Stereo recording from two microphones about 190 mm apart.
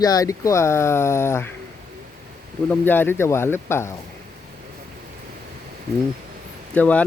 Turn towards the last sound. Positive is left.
turn(degrees=10)  # may be behind; listen again after turning